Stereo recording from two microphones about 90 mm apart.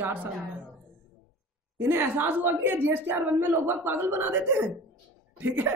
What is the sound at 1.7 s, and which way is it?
A woman's voice, 20° right (ahead or behind).